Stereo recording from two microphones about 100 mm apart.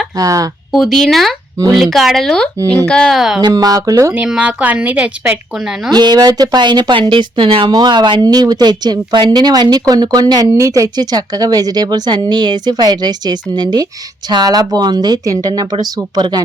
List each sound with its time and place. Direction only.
0.2 s speech: 35° right (ahead or behind)
0.7 s speech: centre (ahead or behind)
3.2 s speech: centre (ahead or behind)
3.4 s speech: 35° right (ahead or behind)
4.1 s speech: 10° right (ahead or behind)
5.9 s speech: 45° right (ahead or behind); by 7.7 s 60° right (ahead or behind)
7.7 s speech: 45° right (ahead or behind)